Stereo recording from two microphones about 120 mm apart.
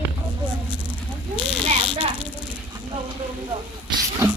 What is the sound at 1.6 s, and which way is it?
Speech, 45° right (ahead or behind).